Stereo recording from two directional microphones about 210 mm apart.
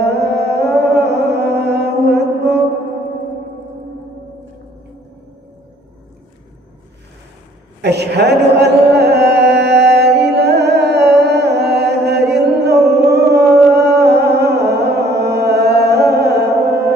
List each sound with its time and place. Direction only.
0.0 s music: 55° right (ahead or behind)
7.8 s music: 55° right (ahead or behind)